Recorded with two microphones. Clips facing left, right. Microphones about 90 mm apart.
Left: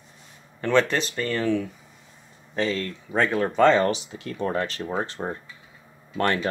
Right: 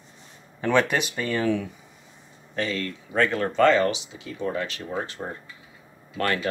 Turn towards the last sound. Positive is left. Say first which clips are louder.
# left 2 dB
turn(degrees=30)  # may be behind; listen again after turning